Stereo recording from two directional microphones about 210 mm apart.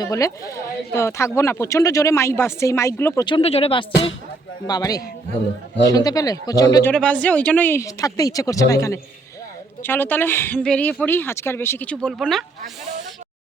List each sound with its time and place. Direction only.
0.0 s speech: 15° left (ahead or behind)
6.9 s speech: 5° left (ahead or behind)